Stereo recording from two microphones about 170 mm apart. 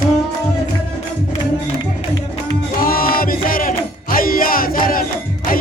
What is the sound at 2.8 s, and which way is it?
Music, 60° left (ahead or behind).